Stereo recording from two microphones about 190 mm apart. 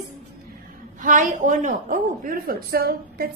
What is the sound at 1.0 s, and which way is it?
A woman's voice, 40° right (ahead or behind).